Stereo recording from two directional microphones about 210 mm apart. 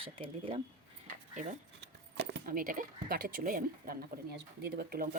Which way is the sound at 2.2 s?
50° right (ahead or behind).